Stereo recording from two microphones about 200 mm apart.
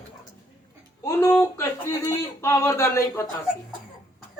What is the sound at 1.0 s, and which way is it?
Speech, 15° left (ahead or behind).